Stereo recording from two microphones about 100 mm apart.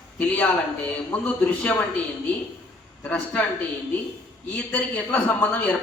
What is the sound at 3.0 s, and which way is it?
Speech, 15° left (ahead or behind).